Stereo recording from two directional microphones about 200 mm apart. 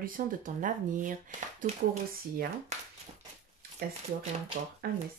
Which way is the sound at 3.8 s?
50° right (ahead or behind).